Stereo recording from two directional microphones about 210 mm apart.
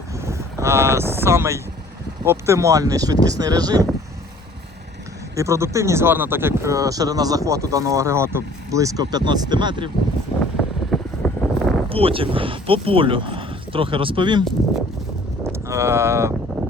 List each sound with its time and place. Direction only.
0.2 s vehicle: 15° right (ahead or behind)
2.2 s speech: 10° right (ahead or behind)
5.3 s speech: 15° right (ahead or behind)
10.6 s wind noise: 5° left (ahead or behind)
11.9 s speech: 25° right (ahead or behind)
15.4 s speech: 15° right (ahead or behind)